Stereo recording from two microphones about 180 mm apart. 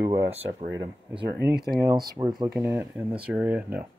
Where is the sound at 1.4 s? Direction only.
65° right (ahead or behind).